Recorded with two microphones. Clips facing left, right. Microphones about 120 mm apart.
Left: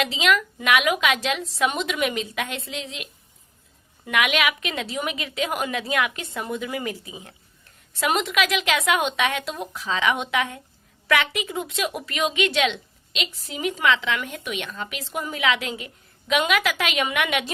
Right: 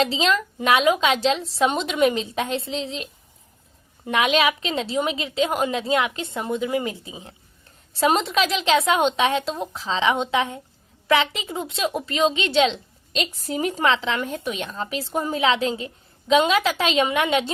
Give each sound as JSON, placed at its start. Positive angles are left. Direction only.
{"t": 0.0, "sound": "a woman's voice", "side_deg": -30}